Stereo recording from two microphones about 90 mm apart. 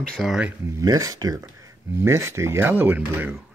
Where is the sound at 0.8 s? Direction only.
40° right (ahead or behind).